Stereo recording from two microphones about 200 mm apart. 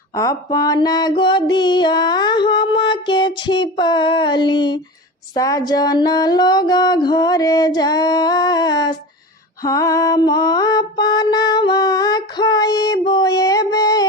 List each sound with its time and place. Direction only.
0.1 s female singing: 15° left (ahead or behind)
9.6 s mantra: 15° left (ahead or behind)